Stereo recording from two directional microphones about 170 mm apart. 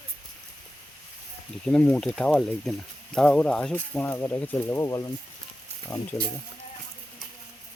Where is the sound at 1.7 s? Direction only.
5° left (ahead or behind).